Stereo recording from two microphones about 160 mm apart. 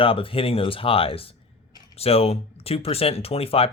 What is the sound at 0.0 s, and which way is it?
Speech, 35° left (ahead or behind).